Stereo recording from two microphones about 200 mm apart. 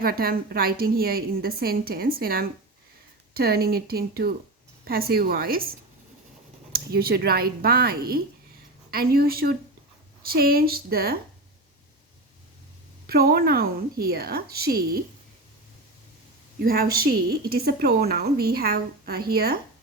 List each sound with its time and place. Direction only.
0.0 s a woman's voice: 50° right (ahead or behind)
6.7 s a woman's voice: 50° right (ahead or behind)
13.1 s a woman's voice: 50° right (ahead or behind)
16.6 s a woman's voice: 50° right (ahead or behind)